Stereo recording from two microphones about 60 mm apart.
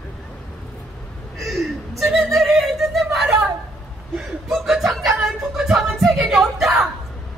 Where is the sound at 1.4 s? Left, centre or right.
Centre.